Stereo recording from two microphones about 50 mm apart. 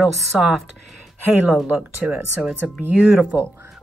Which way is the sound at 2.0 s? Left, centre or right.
Right.